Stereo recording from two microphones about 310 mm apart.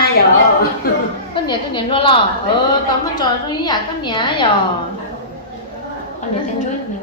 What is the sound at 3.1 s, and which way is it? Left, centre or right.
A woman's voice, centre.